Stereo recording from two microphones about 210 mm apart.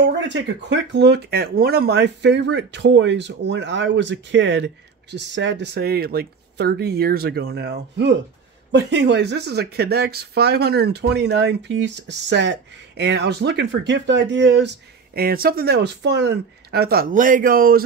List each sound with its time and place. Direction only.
0.0 s speech: 55° right (ahead or behind)
15.1 s speech: 45° right (ahead or behind)